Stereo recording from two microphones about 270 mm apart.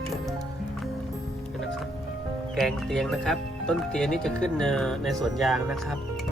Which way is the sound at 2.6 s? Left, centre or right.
Centre.